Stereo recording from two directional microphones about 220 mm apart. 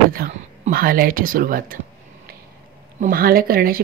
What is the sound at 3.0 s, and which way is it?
Speech, 40° right (ahead or behind).